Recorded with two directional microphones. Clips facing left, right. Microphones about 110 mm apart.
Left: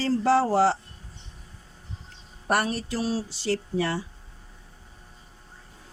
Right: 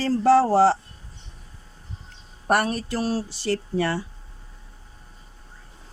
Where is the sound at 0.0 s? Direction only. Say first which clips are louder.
Right 4 dB; 45° right (ahead or behind).